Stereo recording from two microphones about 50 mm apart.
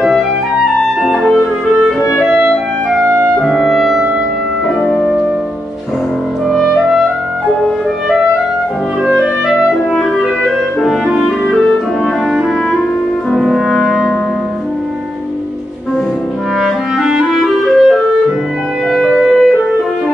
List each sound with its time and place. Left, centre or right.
1.0 s music: centre
2.2 s clarinet: centre
3.4 s clarinet: centre
6.5 s clarinet: centre
9.0 s clarinet: centre
11.1 s clarinet: centre
13.3 s music: centre
16.6 s clarinet: centre
18.9 s music: centre